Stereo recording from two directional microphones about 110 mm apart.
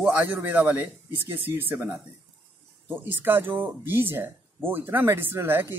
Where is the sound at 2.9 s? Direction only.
20° right (ahead or behind).